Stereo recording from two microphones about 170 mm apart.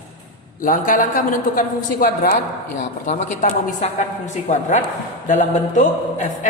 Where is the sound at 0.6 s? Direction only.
50° left (ahead or behind).